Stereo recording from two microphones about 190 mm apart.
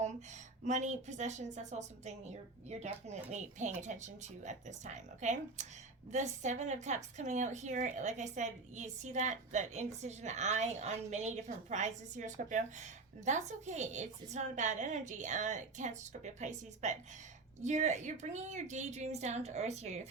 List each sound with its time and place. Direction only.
0.6 s a woman's voice: 40° right (ahead or behind)